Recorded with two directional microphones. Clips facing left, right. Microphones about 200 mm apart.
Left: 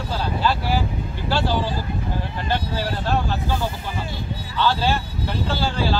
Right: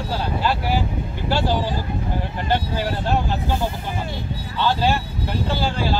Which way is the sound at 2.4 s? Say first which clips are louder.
Right 2 dB; 15° right (ahead or behind).